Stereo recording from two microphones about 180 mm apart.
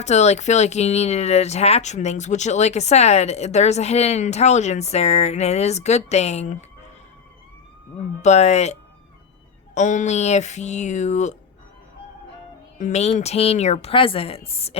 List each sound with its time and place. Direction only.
0.0 s speech: 40° left (ahead or behind)
8.2 s speech: 40° left (ahead or behind)
12.8 s speech: 35° left (ahead or behind)